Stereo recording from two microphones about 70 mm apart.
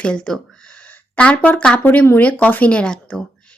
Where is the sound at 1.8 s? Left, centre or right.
Left; by 3.2 s centre.